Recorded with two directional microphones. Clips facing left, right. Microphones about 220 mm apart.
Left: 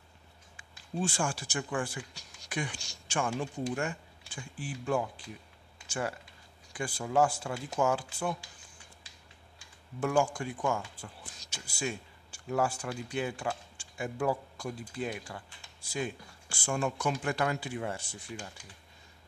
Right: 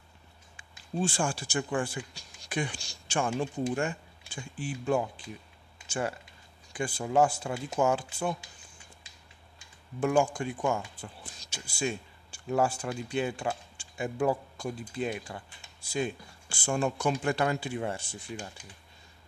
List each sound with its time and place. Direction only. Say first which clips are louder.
0.6 s speech: right 3 dB; 30° right (ahead or behind)
9.6 s speech: right 3 dB; 20° right (ahead or behind)